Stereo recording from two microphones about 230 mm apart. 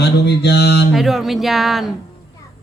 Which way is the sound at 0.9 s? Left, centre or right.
Centre.